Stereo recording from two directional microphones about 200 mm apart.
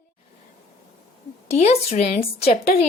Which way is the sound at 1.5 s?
30° left (ahead or behind).